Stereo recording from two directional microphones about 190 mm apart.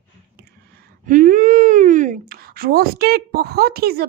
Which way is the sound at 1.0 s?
45° right (ahead or behind).